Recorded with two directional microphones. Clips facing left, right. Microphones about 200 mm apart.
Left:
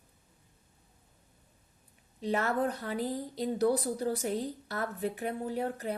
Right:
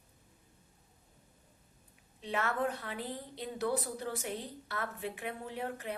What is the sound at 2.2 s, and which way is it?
A woman's voice, 40° left (ahead or behind).